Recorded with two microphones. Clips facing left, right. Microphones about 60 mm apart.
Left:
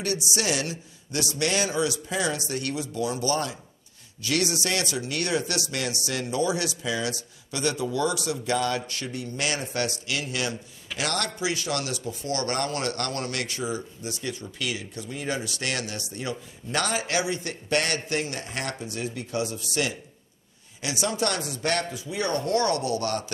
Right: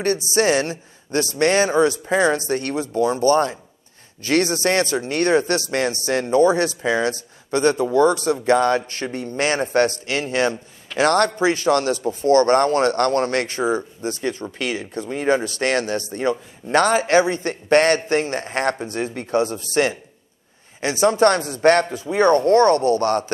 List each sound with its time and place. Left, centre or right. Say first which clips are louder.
0.0 s speech: right 9 dB; right